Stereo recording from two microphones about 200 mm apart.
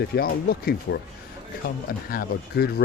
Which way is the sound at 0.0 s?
50° left (ahead or behind).